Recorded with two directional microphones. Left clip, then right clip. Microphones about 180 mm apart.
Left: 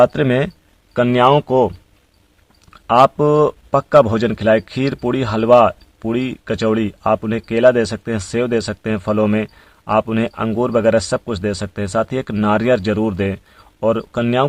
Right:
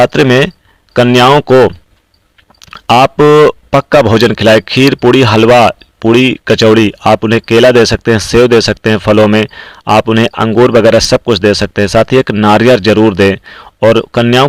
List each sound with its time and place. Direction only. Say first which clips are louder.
0.0 s speech: right 7 dB; 30° right (ahead or behind)
2.6 s a sound: right 5 dB; 40° right (ahead or behind)
3.7 s speech: right 5 dB; 30° right (ahead or behind)